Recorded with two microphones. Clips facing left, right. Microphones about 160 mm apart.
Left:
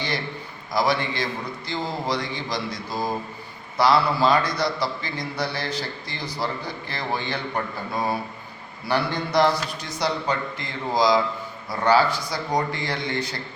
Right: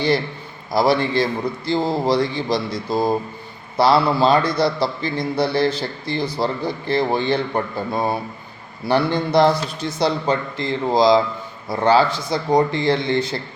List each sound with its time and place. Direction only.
0.7 s a man's voice: 30° right (ahead or behind)